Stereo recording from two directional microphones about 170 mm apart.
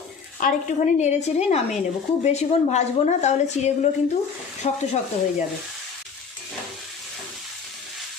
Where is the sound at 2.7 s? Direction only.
40° left (ahead or behind).